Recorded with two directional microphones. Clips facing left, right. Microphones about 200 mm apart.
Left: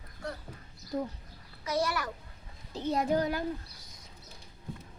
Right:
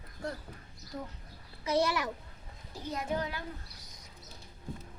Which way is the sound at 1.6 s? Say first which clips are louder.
Right 2 dB; 25° right (ahead or behind).